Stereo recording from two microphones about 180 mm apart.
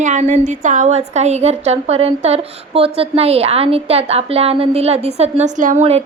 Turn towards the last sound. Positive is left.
turn(degrees=-35)  # may be behind; listen again after turning